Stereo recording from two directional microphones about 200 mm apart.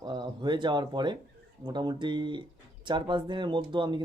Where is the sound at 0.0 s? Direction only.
20° right (ahead or behind).